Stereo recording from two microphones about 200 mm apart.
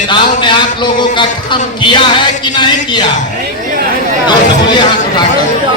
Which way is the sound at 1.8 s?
25° left (ahead or behind).